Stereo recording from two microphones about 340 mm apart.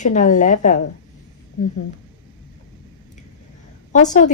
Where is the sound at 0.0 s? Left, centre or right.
Left.